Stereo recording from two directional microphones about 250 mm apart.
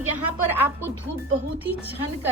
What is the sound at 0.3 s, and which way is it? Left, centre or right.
A woman's voice, centre.